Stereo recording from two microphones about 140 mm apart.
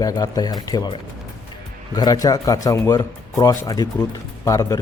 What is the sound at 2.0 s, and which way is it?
Speech, 25° left (ahead or behind).